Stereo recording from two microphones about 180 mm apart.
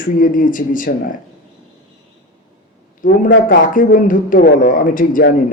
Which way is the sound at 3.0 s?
45° left (ahead or behind).